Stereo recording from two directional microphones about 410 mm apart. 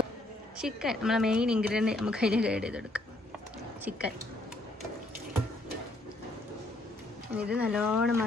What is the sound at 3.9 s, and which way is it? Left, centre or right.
Speech, centre.